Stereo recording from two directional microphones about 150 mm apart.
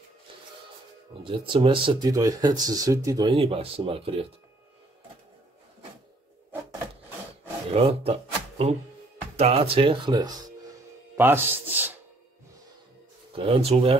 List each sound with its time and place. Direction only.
1.2 s speech: 35° right (ahead or behind)
3.3 s speech: 40° right (ahead or behind)
7.7 s speech: 40° right (ahead or behind)
11.1 s speech: 15° right (ahead or behind)
13.3 s speech: 40° right (ahead or behind)